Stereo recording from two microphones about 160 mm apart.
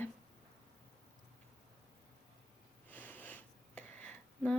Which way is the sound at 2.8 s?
10° left (ahead or behind).